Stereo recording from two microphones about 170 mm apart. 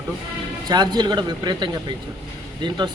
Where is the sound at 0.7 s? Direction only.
25° right (ahead or behind).